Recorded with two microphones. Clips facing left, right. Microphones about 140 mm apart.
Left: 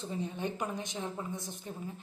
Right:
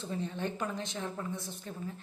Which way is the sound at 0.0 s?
15° left (ahead or behind).